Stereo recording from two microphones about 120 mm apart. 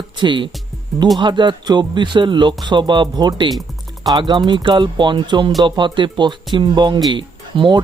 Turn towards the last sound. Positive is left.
turn(degrees=-40)  # may be behind; listen again after turning